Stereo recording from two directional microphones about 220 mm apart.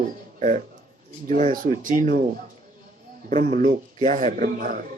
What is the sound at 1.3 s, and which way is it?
A man's voice, 35° right (ahead or behind).